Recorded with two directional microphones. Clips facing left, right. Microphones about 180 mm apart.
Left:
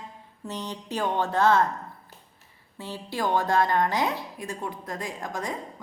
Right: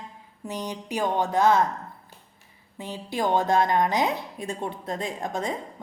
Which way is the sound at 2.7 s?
15° right (ahead or behind).